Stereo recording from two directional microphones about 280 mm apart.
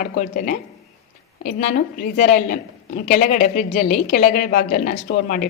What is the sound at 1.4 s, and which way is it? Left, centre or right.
A woman's voice, left.